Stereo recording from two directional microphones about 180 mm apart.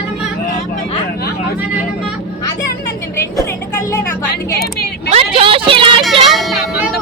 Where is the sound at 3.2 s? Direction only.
15° left (ahead or behind).